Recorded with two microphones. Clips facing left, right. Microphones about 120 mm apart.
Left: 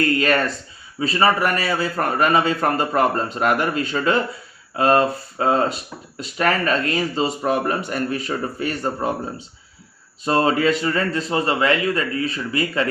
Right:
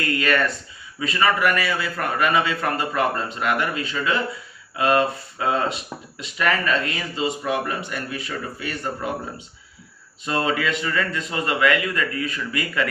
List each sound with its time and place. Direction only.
0.0 s speech: 35° left (ahead or behind)
10.2 s speech: 35° left (ahead or behind)